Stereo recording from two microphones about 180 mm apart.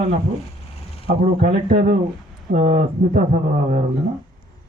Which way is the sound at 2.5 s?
40° right (ahead or behind).